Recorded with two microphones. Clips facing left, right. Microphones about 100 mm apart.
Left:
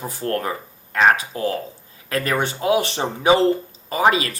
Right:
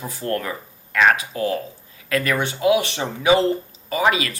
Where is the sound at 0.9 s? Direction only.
30° left (ahead or behind).